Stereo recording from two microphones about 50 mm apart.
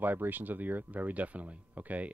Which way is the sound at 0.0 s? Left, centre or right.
Right.